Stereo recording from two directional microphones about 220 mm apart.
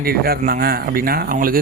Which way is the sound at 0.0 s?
45° right (ahead or behind).